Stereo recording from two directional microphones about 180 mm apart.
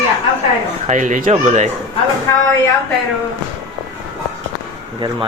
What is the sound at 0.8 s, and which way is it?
Speech, 45° right (ahead or behind).